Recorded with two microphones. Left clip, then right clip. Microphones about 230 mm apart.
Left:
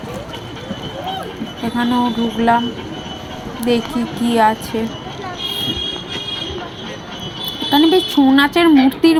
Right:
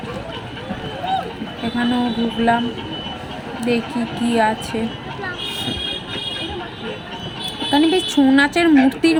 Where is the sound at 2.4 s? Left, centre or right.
Centre.